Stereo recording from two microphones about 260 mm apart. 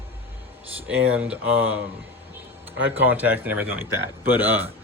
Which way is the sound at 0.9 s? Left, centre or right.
Centre.